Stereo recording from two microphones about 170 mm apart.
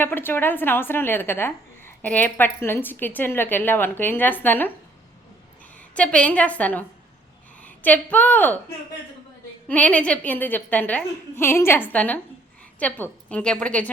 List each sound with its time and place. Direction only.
0.0 s a woman's voice: 10° left (ahead or behind)
5.9 s a woman's voice: 5° left (ahead or behind)
9.6 s a woman's voice: 10° left (ahead or behind)